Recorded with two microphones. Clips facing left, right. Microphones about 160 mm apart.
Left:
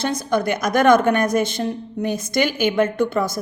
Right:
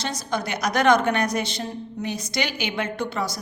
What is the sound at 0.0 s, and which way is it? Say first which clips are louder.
A woman's voice: left 7 dB; 55° left (ahead or behind).